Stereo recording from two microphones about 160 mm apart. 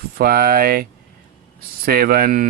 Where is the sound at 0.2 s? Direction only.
70° right (ahead or behind).